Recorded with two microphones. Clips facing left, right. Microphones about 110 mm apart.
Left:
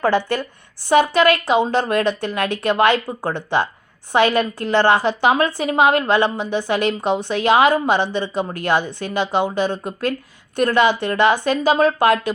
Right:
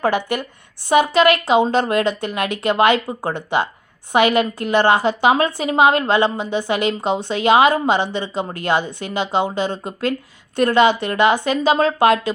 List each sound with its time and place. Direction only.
0.0 s a woman's voice: 15° right (ahead or behind)